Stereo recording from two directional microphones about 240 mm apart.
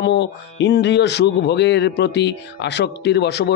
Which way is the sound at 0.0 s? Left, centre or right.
Left.